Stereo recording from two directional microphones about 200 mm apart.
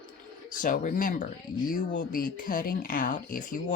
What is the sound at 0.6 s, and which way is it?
Speech, 40° left (ahead or behind).